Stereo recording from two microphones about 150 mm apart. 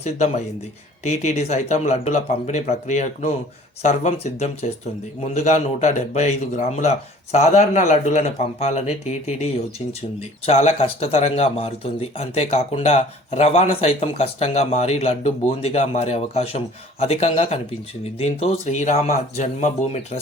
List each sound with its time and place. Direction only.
0.0 s speech: 50° left (ahead or behind)